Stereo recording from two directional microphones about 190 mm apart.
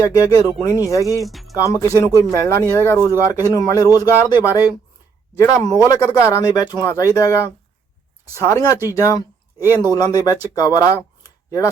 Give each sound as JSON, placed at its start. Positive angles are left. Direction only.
{"t": 0.0, "sound": "speech", "side_deg": 20}
{"t": 1.2, "sound": "music", "side_deg": 0}
{"t": 1.6, "sound": "speech", "side_deg": 15}